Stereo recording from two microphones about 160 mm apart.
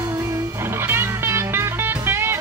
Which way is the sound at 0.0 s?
20° right (ahead or behind).